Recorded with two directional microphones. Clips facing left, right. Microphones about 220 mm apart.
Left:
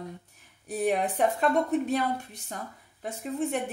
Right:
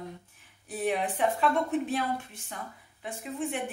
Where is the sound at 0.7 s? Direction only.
40° left (ahead or behind).